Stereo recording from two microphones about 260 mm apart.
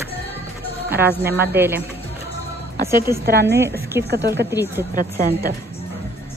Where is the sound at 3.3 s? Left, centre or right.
Right.